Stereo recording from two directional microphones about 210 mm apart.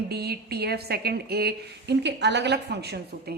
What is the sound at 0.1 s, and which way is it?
A woman's voice, 50° right (ahead or behind).